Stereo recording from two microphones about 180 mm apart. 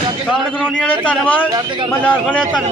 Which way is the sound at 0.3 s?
Centre (ahead or behind).